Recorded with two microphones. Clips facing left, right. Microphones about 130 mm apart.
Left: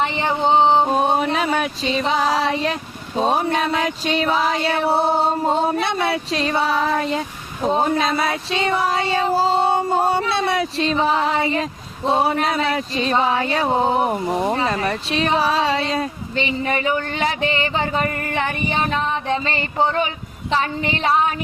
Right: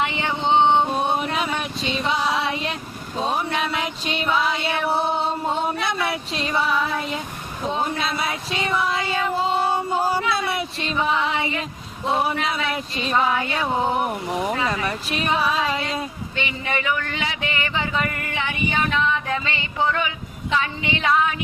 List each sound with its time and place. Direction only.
0.0 s a sound: 35° left (ahead or behind)
2.0 s speech: 40° left (ahead or behind)
7.9 s female singing: 40° left (ahead or behind)
12.0 s speech: 30° left (ahead or behind)